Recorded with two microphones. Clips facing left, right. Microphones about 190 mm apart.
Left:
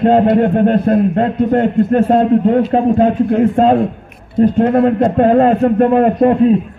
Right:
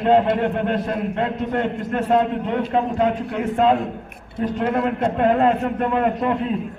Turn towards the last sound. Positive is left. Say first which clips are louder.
# left 9 dB
turn(degrees=45)  # may be behind; listen again after turning